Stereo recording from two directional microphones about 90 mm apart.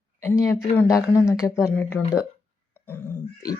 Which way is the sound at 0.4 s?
30° left (ahead or behind).